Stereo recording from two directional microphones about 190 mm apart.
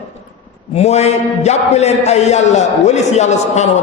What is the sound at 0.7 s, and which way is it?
A man's voice, 35° left (ahead or behind).